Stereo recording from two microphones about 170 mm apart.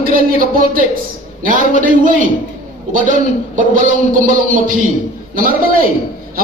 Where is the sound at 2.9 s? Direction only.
50° right (ahead or behind).